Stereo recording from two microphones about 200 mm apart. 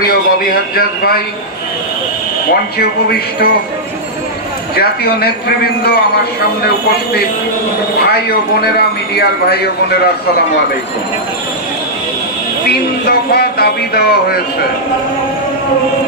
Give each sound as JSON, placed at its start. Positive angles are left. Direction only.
{"t": 0.7, "sound": "speech", "side_deg": 50}
{"t": 2.8, "sound": "speech", "side_deg": 50}
{"t": 4.7, "sound": "speech", "side_deg": 50}
{"t": 8.0, "sound": "speech", "side_deg": 50}
{"t": 13.0, "sound": "speech", "side_deg": 50}